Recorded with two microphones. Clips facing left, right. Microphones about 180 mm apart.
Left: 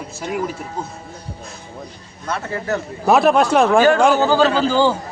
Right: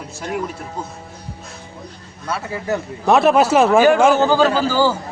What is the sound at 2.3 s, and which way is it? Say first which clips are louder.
Speech: even; 15° right (ahead or behind).